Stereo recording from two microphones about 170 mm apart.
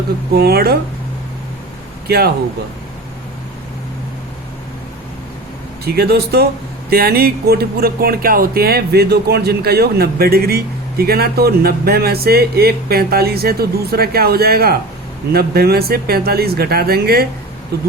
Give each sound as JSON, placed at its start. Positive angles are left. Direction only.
{"t": 0.3, "sound": "speech", "side_deg": -70}
{"t": 2.0, "sound": "speech", "side_deg": -65}
{"t": 5.8, "sound": "speech", "side_deg": -70}